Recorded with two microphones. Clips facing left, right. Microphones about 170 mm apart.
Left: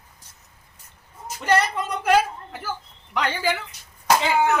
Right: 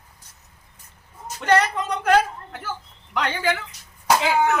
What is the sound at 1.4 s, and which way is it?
Speech, 5° left (ahead or behind).